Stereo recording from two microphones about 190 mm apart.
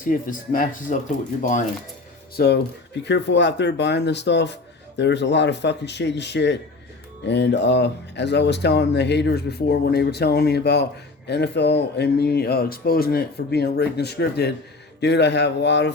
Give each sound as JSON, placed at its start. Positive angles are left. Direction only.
{"t": 0.0, "sound": "speech", "side_deg": 45}
{"t": 2.3, "sound": "speech", "side_deg": 55}